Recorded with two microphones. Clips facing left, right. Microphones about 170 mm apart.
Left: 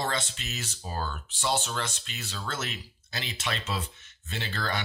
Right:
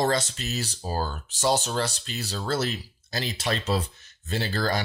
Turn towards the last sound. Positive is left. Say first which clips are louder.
# right 6 dB
turn(degrees=-40)  # may be behind; listen again after turning